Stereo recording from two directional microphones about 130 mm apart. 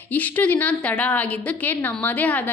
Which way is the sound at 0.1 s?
10° left (ahead or behind).